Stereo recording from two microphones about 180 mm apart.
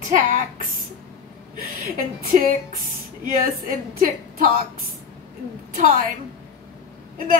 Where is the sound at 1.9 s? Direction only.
50° right (ahead or behind).